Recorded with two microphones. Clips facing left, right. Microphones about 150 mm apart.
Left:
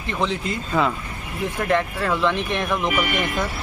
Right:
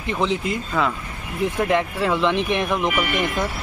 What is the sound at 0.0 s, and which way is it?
Speech, 15° right (ahead or behind).